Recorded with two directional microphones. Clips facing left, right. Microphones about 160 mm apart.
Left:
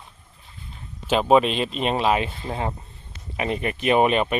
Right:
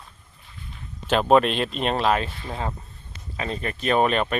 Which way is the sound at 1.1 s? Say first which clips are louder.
Even; 5° left (ahead or behind).